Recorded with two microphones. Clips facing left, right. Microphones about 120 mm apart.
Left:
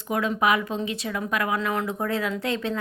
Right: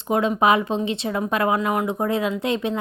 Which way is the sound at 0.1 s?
25° right (ahead or behind).